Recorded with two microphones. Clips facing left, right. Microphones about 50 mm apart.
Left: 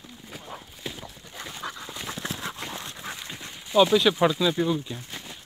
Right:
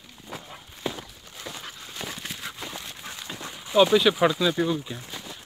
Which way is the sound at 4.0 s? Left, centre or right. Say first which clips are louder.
Right 1 dB; centre.